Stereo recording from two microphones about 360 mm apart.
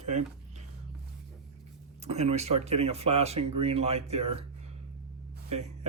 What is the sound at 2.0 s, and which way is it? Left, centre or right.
Speech, centre.